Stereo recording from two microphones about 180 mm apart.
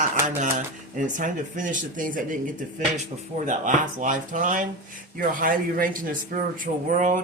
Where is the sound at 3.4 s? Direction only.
45° right (ahead or behind).